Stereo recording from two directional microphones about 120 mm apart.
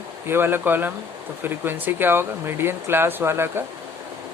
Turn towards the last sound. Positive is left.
turn(degrees=-20)  # may be behind; listen again after turning